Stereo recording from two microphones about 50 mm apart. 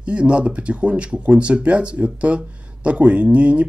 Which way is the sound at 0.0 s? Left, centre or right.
Right.